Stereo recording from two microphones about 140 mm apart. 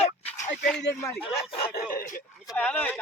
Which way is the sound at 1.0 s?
20° left (ahead or behind).